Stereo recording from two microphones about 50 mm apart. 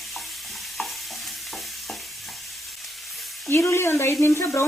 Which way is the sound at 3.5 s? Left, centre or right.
Left.